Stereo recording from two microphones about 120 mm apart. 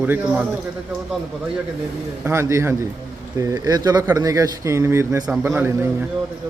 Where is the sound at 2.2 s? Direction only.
20° right (ahead or behind).